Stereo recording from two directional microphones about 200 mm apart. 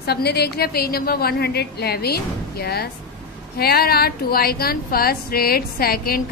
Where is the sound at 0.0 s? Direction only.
55° left (ahead or behind).